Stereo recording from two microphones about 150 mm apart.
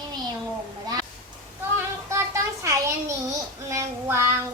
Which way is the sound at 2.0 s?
20° right (ahead or behind).